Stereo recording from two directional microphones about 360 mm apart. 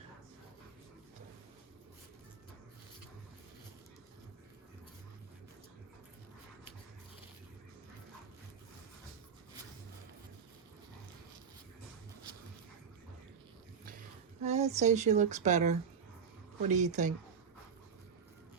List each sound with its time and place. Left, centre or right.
14.4 s speech: centre